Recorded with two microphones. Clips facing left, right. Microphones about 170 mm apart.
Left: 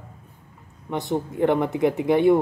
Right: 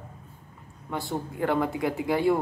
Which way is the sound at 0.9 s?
20° left (ahead or behind).